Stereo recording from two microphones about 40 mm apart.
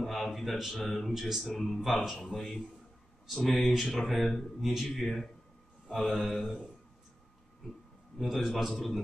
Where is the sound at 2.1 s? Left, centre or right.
Centre.